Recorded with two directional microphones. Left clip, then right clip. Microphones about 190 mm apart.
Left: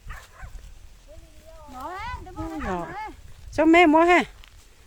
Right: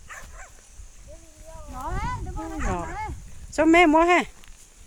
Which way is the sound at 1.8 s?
15° left (ahead or behind).